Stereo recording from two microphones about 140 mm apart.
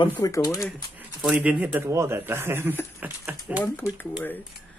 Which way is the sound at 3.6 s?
20° left (ahead or behind).